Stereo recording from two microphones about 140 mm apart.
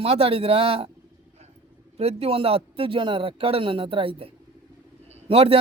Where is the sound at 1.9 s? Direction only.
45° right (ahead or behind).